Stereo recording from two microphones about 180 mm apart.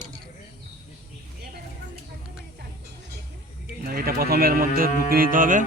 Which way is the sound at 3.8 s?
55° right (ahead or behind).